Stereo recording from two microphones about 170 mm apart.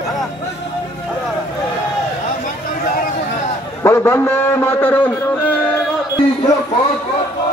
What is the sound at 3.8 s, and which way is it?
A man's voice, 15° left (ahead or behind).